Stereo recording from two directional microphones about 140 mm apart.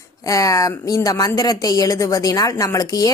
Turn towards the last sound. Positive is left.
turn(degrees=25)  # may be behind; listen again after turning